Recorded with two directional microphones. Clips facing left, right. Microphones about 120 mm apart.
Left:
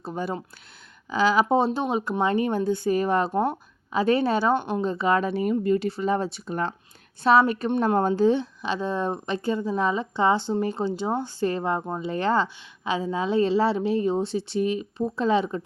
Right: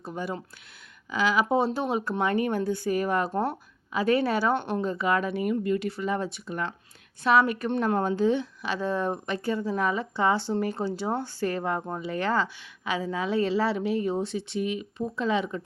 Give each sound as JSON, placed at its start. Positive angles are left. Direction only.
{"t": 0.0, "sound": "a woman's voice", "side_deg": 30}
{"t": 4.5, "sound": "a woman's voice", "side_deg": 15}
{"t": 4.9, "sound": "a woman's voice", "side_deg": 30}